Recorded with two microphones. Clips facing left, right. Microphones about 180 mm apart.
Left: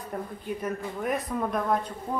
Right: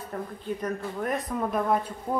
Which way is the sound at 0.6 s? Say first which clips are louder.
Even; centre (ahead or behind).